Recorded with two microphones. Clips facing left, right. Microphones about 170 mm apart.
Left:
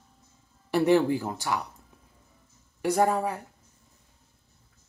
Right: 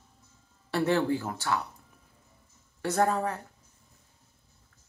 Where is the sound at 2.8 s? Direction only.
15° left (ahead or behind).